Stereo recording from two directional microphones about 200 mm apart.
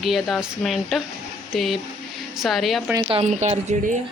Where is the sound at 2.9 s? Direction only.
20° right (ahead or behind).